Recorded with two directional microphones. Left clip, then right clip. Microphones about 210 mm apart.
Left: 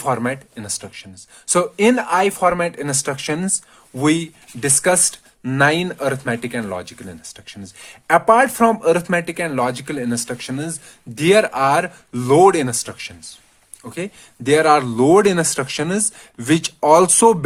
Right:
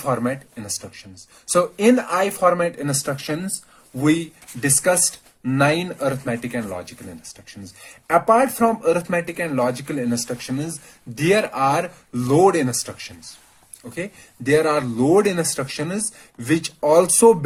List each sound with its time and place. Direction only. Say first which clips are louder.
0.0 s speech: left 2 dB; 40° left (ahead or behind)
4.6 s speech: left 2 dB; 45° left (ahead or behind)